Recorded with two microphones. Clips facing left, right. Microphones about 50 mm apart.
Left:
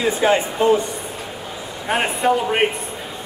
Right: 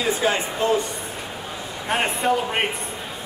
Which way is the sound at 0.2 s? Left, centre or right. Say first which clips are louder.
Left 5 dB; left.